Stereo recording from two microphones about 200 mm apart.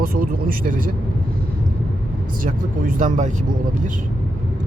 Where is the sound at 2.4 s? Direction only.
40° right (ahead or behind).